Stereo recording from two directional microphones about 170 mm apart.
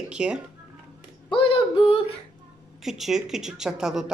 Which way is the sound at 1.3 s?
30° left (ahead or behind).